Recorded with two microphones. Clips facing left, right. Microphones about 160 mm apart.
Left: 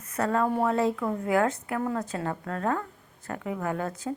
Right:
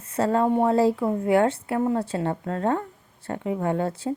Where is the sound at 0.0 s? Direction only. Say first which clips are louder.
Right 4 dB; 30° right (ahead or behind).